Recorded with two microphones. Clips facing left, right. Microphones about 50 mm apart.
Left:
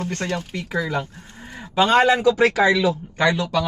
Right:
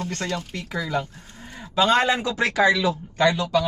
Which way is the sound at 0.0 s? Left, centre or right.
Left.